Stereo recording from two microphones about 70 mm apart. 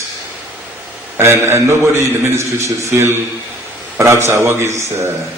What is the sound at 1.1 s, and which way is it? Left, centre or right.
A man's voice, right.